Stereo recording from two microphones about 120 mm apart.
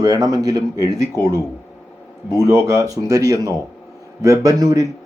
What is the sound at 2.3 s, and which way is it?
Speech, 25° right (ahead or behind).